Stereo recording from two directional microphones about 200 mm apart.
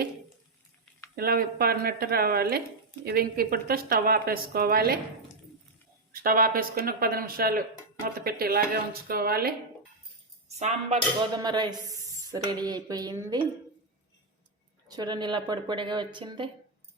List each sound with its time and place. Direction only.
1.1 s speech: 50° right (ahead or behind)
6.2 s speech: 45° right (ahead or behind)
10.6 s speech: 35° right (ahead or behind)
11.3 s speech: 20° right (ahead or behind)
14.8 s speech: 20° right (ahead or behind)